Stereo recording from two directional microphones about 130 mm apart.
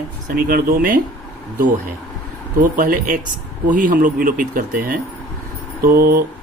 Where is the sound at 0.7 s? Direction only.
90° right.